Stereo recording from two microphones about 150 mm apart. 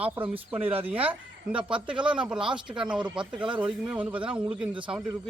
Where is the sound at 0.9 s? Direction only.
40° right (ahead or behind).